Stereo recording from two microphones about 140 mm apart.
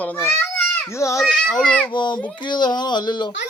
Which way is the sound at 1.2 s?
Centre (ahead or behind).